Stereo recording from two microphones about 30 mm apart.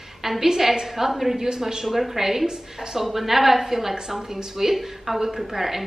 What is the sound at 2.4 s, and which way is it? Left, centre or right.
Speech, right.